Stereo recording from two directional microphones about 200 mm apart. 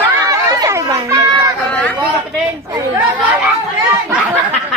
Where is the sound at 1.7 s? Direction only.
5° left (ahead or behind).